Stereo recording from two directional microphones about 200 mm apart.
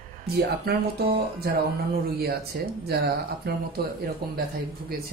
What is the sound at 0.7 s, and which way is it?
A man's voice, 50° right (ahead or behind).